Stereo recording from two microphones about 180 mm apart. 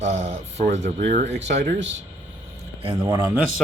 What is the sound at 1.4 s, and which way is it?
Speech, 85° right.